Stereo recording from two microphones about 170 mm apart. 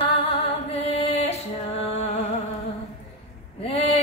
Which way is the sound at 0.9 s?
35° left (ahead or behind).